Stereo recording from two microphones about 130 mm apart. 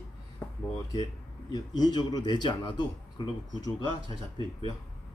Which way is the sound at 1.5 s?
30° left (ahead or behind).